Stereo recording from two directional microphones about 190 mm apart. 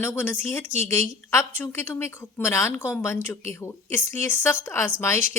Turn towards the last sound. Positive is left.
turn(degrees=15)  # may be behind; listen again after turning